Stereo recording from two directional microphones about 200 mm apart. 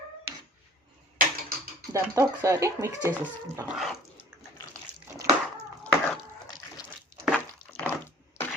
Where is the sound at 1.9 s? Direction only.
15° right (ahead or behind).